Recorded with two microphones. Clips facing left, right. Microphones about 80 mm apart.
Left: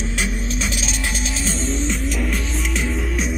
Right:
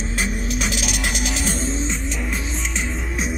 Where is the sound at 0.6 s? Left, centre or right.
Right.